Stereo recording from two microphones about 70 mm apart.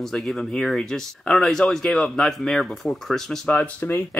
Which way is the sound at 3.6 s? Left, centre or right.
Left.